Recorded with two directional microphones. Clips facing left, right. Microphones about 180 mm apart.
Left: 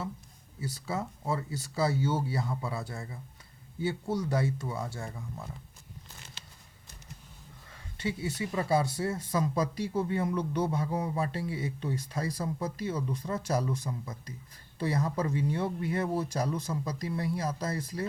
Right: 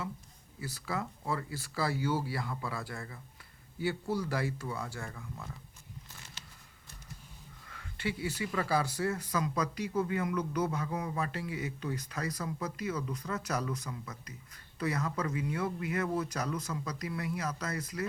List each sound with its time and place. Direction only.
0.9 s speech: 25° left (ahead or behind)
7.7 s speech: 25° left (ahead or behind)